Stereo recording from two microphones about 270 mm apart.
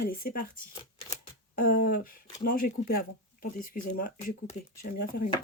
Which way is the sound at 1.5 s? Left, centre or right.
Left.